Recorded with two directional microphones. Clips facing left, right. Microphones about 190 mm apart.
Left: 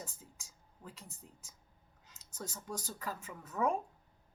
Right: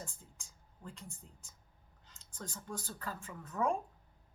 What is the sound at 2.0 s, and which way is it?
A woman's voice, 10° left (ahead or behind).